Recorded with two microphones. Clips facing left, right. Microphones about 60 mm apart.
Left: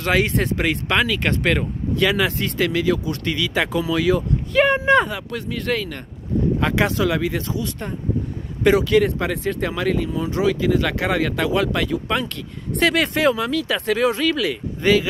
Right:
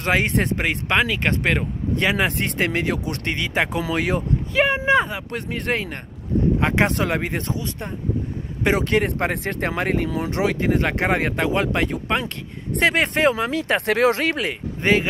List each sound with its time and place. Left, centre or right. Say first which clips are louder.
0.0 s speech: left 1 dB; right
2.3 s speech: left 1 dB; right
4.6 s speech: left 3 dB; centre
5.3 s speech: left 1 dB; right
6.9 s speech: left 2 dB; right
8.8 s speech: left 3 dB; right
13.7 s speech: right 3 dB; right
14.3 s speech: left 3 dB; right